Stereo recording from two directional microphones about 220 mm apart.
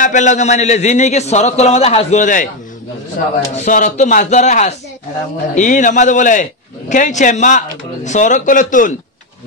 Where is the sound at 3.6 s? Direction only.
35° left (ahead or behind).